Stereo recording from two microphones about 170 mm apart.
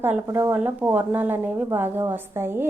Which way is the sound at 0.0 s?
10° right (ahead or behind).